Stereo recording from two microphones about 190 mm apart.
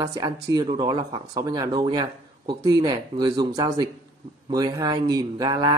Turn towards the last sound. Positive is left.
turn(degrees=-20)  # may be behind; listen again after turning